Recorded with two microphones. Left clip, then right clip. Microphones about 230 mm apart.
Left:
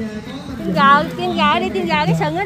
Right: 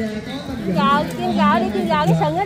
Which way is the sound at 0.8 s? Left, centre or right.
Left.